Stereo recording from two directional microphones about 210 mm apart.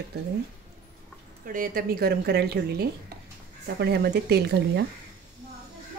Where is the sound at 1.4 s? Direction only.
40° right (ahead or behind).